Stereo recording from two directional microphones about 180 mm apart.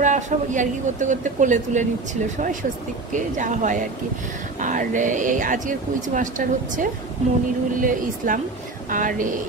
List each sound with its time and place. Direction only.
0.0 s speech: 45° right (ahead or behind)